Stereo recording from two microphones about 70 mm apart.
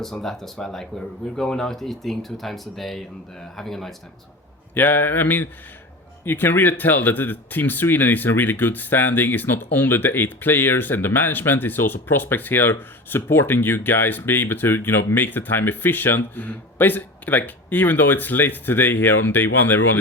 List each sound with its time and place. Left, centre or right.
0.0 s speech: centre
4.7 s speech: left